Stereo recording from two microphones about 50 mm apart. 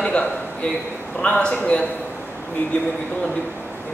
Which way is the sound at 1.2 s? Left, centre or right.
Left.